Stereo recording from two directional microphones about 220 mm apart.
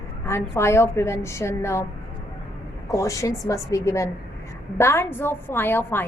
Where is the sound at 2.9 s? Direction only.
15° left (ahead or behind).